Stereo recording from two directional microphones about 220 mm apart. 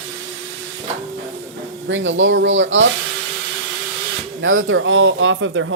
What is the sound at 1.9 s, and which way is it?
Speech, 60° right (ahead or behind).